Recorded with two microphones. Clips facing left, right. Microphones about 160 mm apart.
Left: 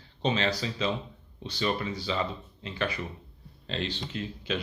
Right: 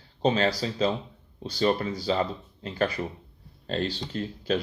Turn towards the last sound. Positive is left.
turn(degrees=-40)  # may be behind; listen again after turning